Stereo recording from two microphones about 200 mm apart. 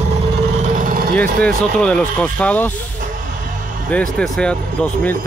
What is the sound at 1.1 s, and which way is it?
Speech, 5° left (ahead or behind).